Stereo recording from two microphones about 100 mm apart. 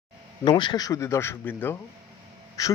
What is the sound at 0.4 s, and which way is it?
Speech, 50° left (ahead or behind).